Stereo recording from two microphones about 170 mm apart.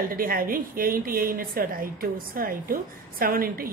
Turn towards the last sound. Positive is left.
turn(degrees=-60)  # may be behind; listen again after turning